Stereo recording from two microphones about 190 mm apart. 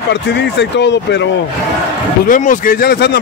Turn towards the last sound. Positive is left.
turn(degrees=55)  # may be behind; listen again after turning